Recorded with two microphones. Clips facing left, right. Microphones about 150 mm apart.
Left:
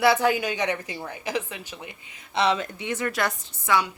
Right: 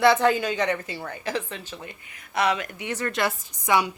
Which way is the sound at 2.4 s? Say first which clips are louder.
Left 1 dB; 25° left (ahead or behind).